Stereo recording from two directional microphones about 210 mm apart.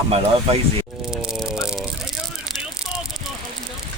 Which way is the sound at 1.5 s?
5° right (ahead or behind).